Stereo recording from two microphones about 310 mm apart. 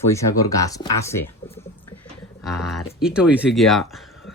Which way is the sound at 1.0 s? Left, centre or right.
Centre.